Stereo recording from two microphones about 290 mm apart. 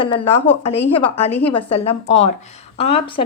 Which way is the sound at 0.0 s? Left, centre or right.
Centre.